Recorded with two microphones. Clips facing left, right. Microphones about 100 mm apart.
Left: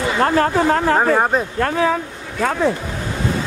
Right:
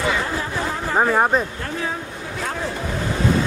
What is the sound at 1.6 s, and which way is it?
Speech, 90° left.